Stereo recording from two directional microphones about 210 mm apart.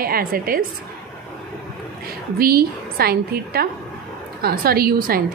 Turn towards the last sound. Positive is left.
turn(degrees=-45)  # may be behind; listen again after turning